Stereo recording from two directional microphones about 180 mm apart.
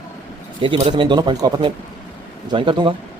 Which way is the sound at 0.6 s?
25° right (ahead or behind).